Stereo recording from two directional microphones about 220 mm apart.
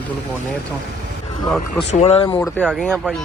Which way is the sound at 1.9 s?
30° left (ahead or behind).